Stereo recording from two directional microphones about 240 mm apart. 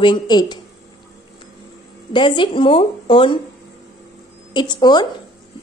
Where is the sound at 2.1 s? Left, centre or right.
Left.